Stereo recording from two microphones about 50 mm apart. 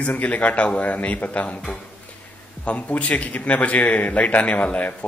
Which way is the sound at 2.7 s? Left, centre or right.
Left.